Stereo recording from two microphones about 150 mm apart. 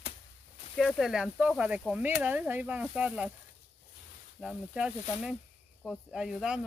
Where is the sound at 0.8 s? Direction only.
Centre (ahead or behind).